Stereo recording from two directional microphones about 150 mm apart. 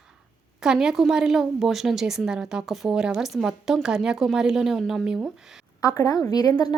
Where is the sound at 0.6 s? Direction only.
5° right (ahead or behind).